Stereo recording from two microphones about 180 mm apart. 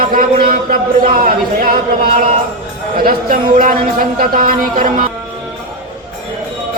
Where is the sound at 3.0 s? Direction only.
55° right (ahead or behind).